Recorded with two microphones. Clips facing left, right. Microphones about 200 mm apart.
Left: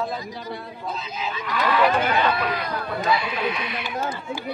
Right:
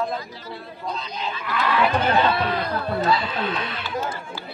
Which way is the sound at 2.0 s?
30° right (ahead or behind).